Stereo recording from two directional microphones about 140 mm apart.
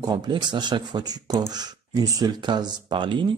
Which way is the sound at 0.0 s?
30° right (ahead or behind).